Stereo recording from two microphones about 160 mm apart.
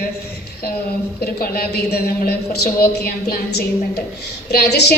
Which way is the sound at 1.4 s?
75° left (ahead or behind).